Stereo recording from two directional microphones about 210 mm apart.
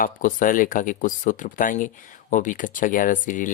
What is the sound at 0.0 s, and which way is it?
Speech, 40° left (ahead or behind).